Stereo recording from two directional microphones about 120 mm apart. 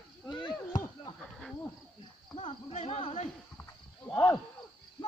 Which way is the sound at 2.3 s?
60° left (ahead or behind).